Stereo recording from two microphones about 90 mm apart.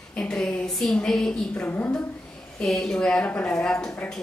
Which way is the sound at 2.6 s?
5° left (ahead or behind).